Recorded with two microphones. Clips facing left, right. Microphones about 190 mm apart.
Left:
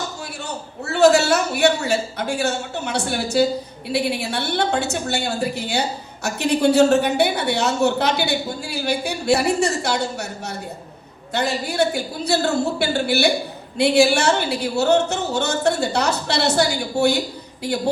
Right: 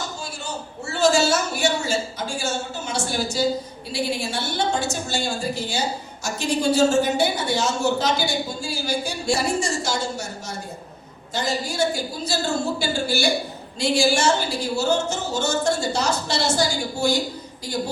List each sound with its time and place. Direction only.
0.4 s a man's voice: 65° left (ahead or behind)